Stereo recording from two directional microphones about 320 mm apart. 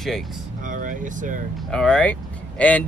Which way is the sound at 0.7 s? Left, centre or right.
Right.